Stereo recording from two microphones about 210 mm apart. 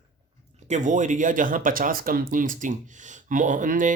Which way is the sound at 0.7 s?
35° right (ahead or behind).